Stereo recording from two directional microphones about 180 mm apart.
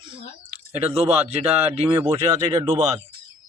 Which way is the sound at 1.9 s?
15° right (ahead or behind).